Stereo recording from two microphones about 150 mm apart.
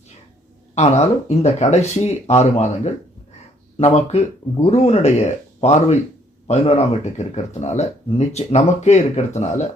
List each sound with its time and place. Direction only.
0.8 s speech: 45° left (ahead or behind)